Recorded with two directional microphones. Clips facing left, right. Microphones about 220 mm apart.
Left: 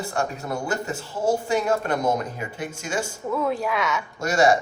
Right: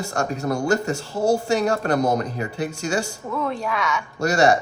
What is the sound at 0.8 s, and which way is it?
Speech, 75° right (ahead or behind).